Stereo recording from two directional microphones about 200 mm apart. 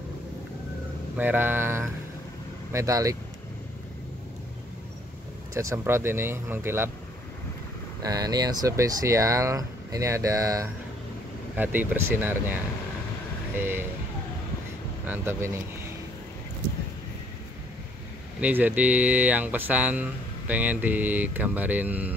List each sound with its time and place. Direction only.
1.1 s speech: 10° right (ahead or behind)
5.6 s speech: 15° right (ahead or behind)
8.0 s speech: 20° right (ahead or behind)
13.6 s speech: 10° right (ahead or behind)
15.0 s speech: 10° right (ahead or behind)
18.4 s speech: 10° right (ahead or behind)